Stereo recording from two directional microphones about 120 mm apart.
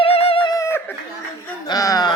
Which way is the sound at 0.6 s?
20° left (ahead or behind).